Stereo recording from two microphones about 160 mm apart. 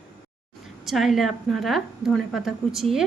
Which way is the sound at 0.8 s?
Centre (ahead or behind).